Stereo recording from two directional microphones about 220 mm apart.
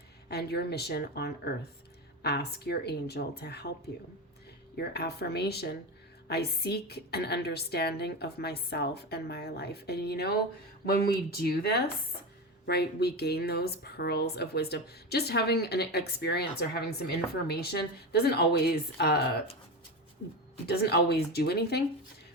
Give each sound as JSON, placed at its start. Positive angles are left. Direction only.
{"t": 0.3, "sound": "speech", "side_deg": 45}
{"t": 4.8, "sound": "speech", "side_deg": 45}
{"t": 20.7, "sound": "speech", "side_deg": 45}